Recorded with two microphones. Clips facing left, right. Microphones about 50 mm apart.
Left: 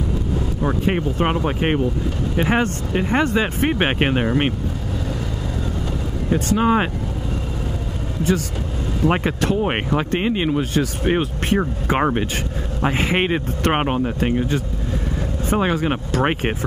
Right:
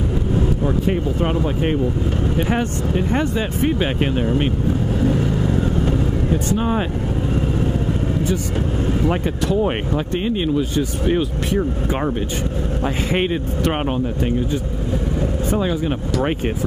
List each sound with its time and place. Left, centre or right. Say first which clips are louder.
0.7 s speech: right 1 dB; left
6.3 s speech: left 5 dB; left
9.0 s speech: left 1 dB; left